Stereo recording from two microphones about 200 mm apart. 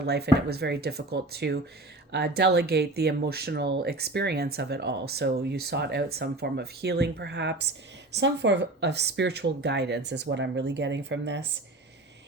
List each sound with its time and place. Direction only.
0.0 s speech: 55° right (ahead or behind)